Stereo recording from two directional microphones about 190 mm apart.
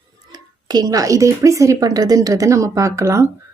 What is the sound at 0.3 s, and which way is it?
Speech, 20° right (ahead or behind).